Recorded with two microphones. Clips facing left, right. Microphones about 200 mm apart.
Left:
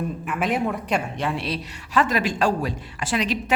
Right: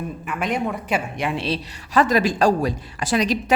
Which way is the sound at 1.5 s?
35° right (ahead or behind).